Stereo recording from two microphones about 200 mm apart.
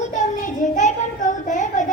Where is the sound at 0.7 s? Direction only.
40° left (ahead or behind).